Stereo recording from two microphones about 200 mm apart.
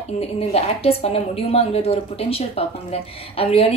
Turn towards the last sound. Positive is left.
turn(degrees=30)  # may be behind; listen again after turning